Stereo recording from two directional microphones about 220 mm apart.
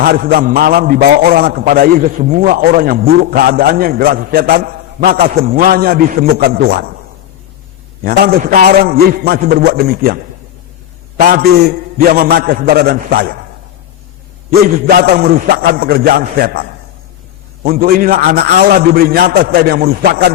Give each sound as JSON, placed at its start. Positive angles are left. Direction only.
{"t": 0.0, "sound": "a man's voice", "side_deg": -45}
{"t": 5.3, "sound": "a man's voice", "side_deg": -30}
{"t": 5.5, "sound": "a man's voice", "side_deg": -45}
{"t": 8.0, "sound": "a man's voice", "side_deg": -40}
{"t": 11.3, "sound": "a man's voice", "side_deg": -45}
{"t": 14.8, "sound": "a man's voice", "side_deg": -45}